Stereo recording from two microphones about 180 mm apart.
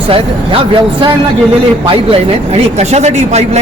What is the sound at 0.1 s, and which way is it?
A woman's voice, 30° right (ahead or behind).